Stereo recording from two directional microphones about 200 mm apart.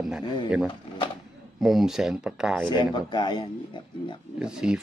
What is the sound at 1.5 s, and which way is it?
Speech, centre (ahead or behind).